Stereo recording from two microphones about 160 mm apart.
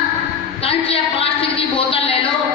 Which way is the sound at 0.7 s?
35° left (ahead or behind).